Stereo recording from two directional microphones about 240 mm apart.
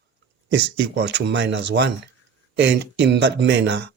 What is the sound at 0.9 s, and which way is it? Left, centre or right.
Speech, right.